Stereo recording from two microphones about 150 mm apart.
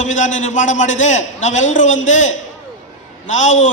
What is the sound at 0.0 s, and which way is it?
A man's voice, 55° left (ahead or behind).